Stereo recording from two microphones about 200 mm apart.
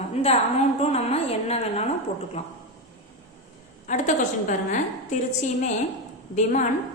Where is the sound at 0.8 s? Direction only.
30° left (ahead or behind).